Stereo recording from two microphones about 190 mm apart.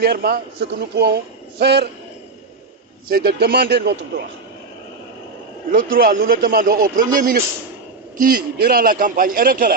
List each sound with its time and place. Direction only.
0.0 s a man's voice: 55° right (ahead or behind)
3.1 s a man's voice: 55° right (ahead or behind)
5.9 s a man's voice: 50° right (ahead or behind)